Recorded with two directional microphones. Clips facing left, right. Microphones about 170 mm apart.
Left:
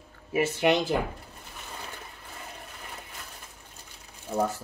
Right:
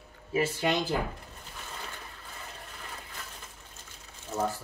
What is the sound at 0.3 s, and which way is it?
Speech, 20° left (ahead or behind).